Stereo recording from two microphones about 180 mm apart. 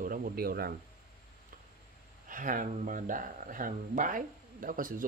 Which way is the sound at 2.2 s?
45° right (ahead or behind).